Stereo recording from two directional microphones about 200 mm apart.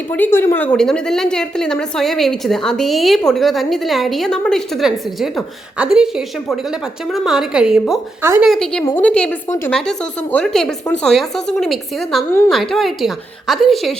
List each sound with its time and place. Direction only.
0.1 s a woman's voice: 10° left (ahead or behind); by 8.4 s 10° right (ahead or behind)
8.4 s a woman's voice: centre (ahead or behind)
8.8 s a woman's voice: 15° left (ahead or behind)
9.0 s a woman's voice: 5° left (ahead or behind)